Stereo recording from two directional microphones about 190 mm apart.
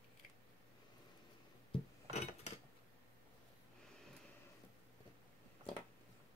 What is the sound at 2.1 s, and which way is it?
Cutlery, 35° left (ahead or behind).